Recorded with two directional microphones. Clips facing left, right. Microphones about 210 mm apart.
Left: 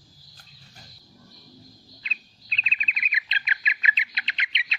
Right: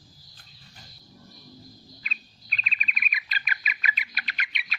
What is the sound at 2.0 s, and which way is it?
Bird, 25° left (ahead or behind).